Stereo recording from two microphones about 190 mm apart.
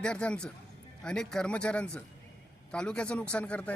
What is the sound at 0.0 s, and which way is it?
A man's voice, 5° left (ahead or behind).